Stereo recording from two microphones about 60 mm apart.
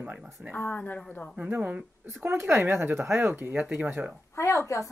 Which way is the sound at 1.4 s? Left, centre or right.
Right.